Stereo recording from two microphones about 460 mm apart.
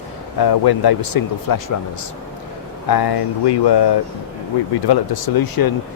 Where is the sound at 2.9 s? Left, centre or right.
Left.